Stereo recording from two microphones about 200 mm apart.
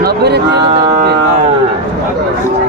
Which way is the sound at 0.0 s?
55° right (ahead or behind).